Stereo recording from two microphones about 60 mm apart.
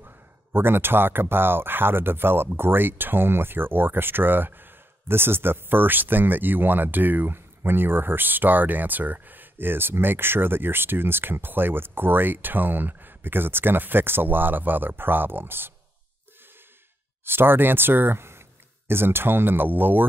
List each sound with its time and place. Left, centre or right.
0.0 s speech: right
17.2 s speech: right